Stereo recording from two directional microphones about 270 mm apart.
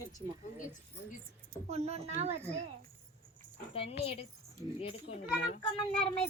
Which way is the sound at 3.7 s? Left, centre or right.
Left.